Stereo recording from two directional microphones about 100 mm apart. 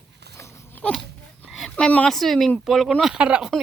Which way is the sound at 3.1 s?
10° right (ahead or behind).